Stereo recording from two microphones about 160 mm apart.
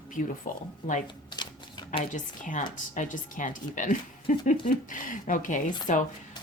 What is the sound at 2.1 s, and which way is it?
Speech, 55° left (ahead or behind).